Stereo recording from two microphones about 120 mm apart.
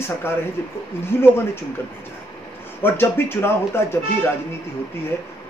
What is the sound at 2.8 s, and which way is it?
Speech, 20° left (ahead or behind).